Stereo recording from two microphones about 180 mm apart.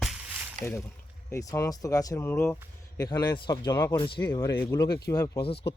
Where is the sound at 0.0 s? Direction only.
5° right (ahead or behind).